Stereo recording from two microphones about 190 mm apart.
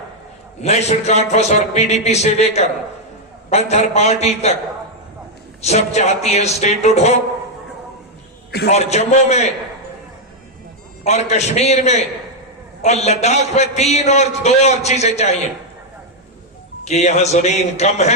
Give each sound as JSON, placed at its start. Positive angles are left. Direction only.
{"t": 0.6, "sound": "a man's voice", "side_deg": 35}
{"t": 5.6, "sound": "a man's voice", "side_deg": 35}
{"t": 8.7, "sound": "a man's voice", "side_deg": 35}
{"t": 11.0, "sound": "a man's voice", "side_deg": 35}
{"t": 16.8, "sound": "a man's voice", "side_deg": 35}